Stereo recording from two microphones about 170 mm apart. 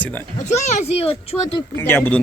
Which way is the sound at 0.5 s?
40° left (ahead or behind).